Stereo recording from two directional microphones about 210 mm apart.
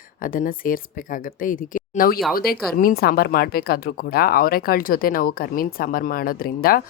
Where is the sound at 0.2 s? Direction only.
40° left (ahead or behind).